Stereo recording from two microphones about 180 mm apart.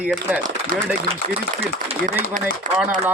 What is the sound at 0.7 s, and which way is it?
Speech, 45° right (ahead or behind).